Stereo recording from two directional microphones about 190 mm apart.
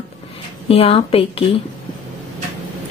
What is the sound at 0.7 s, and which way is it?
Speech, 30° left (ahead or behind).